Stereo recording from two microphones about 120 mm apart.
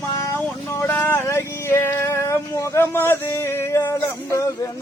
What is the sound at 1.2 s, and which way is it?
Music, 20° left (ahead or behind).